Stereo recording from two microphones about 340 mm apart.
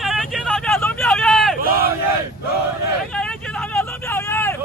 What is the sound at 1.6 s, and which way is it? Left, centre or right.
Battle cry, right.